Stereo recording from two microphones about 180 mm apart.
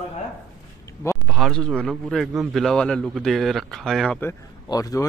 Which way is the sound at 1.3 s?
Centre (ahead or behind).